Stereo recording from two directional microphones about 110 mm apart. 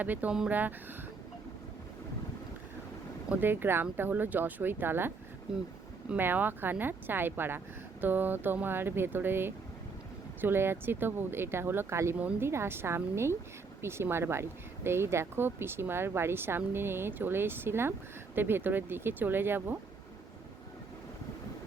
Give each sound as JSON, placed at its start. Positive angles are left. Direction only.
{"t": 0.0, "sound": "speech", "side_deg": -15}
{"t": 3.2, "sound": "speech", "side_deg": -20}